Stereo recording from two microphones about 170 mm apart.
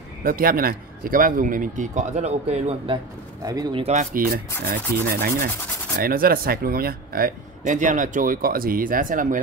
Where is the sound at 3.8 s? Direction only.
45° right (ahead or behind).